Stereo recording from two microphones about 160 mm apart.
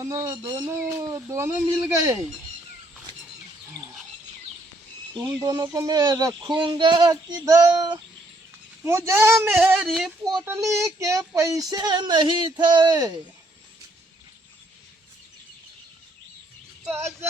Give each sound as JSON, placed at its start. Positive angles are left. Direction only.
{"t": 0.0, "sound": "speech", "side_deg": -20}
{"t": 5.4, "sound": "speech", "side_deg": -20}
{"t": 9.8, "sound": "speech", "side_deg": 0}
{"t": 10.4, "sound": "speech", "side_deg": -15}
{"t": 16.9, "sound": "speech", "side_deg": -15}